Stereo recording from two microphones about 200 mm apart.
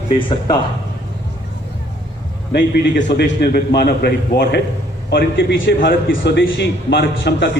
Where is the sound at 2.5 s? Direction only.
60° left (ahead or behind).